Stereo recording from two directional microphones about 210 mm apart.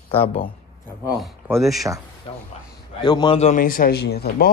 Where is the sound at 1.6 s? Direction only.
Centre (ahead or behind).